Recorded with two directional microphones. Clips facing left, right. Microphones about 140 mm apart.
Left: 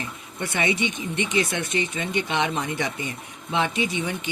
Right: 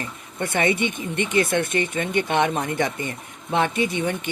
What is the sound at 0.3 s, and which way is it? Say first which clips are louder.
Speech: right 3 dB; 50° right (ahead or behind).